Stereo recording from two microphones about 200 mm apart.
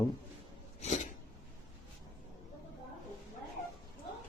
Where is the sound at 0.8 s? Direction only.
35° left (ahead or behind).